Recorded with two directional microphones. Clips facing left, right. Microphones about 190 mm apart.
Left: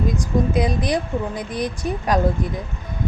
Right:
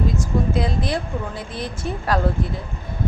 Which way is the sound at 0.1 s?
15° left (ahead or behind).